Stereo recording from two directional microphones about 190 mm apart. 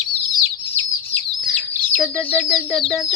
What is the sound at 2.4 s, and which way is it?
Speech, centre (ahead or behind).